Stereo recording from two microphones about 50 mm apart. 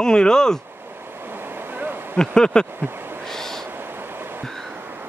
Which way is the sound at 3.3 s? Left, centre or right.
Centre.